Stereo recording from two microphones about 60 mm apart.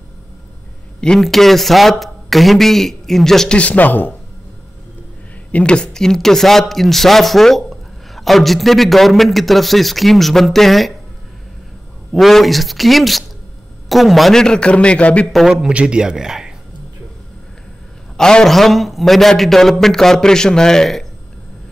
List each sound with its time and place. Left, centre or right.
1.2 s a man's voice: centre
3.5 s a man's voice: left
5.5 s a man's voice: centre
12.1 s a man's voice: centre
14.4 s a man's voice: centre
15.5 s speech: centre
18.1 s a man's voice: centre